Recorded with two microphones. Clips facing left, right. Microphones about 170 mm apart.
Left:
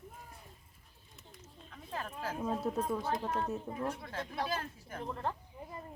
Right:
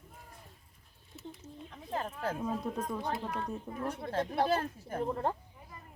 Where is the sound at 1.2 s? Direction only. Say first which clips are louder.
Right 14 dB; centre (ahead or behind).